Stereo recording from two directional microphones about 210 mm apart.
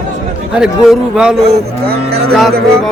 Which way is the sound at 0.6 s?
5° right (ahead or behind).